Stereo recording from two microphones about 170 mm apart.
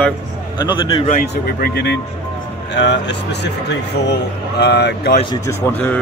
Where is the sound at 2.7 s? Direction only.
90° left.